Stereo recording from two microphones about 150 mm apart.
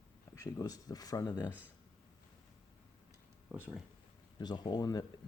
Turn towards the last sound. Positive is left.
turn(degrees=25)  # may be behind; listen again after turning